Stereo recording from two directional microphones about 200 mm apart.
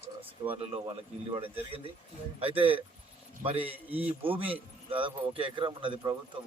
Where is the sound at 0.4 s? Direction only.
25° right (ahead or behind).